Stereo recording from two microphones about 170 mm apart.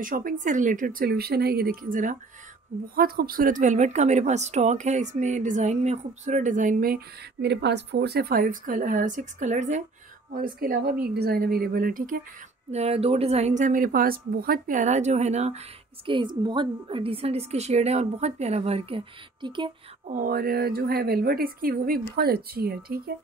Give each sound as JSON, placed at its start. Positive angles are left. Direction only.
{"t": 0.0, "sound": "speech", "side_deg": -55}
{"t": 7.4, "sound": "speech", "side_deg": -85}
{"t": 10.3, "sound": "a woman's voice", "side_deg": -60}
{"t": 12.7, "sound": "speech", "side_deg": -35}
{"t": 16.1, "sound": "a woman's voice", "side_deg": -30}
{"t": 20.1, "sound": "a woman's voice", "side_deg": -55}